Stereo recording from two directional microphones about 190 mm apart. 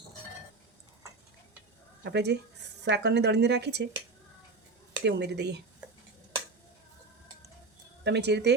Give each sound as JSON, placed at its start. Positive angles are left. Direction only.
{"t": 2.0, "sound": "speech", "side_deg": -60}
{"t": 5.0, "sound": "speech", "side_deg": -60}
{"t": 8.0, "sound": "speech", "side_deg": -60}